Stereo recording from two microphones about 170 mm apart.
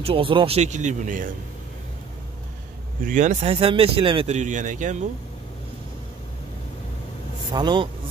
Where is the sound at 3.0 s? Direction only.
50° right (ahead or behind).